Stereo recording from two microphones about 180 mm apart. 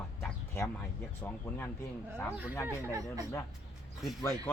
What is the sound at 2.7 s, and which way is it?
Speech, 15° right (ahead or behind).